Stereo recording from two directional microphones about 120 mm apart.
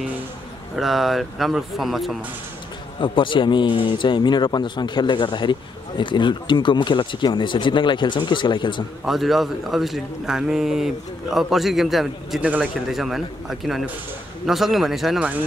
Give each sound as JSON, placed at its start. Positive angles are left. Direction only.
{"t": 0.7, "sound": "a man's voice", "side_deg": 0}
{"t": 3.0, "sound": "speech", "side_deg": 45}
{"t": 9.0, "sound": "a man's voice", "side_deg": 0}